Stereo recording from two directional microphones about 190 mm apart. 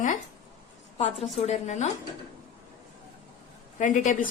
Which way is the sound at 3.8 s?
40° left (ahead or behind).